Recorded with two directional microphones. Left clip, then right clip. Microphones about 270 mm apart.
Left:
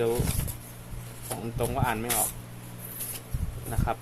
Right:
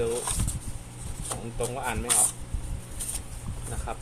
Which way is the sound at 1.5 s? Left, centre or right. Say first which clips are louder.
Left 3 dB; left.